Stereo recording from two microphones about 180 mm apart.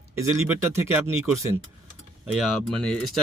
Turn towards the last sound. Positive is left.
turn(degrees=5)  # may be behind; listen again after turning